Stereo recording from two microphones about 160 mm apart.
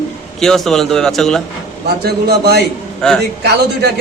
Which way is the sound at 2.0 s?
85° right.